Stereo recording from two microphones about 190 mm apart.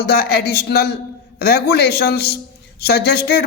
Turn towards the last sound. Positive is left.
turn(degrees=55)  # may be behind; listen again after turning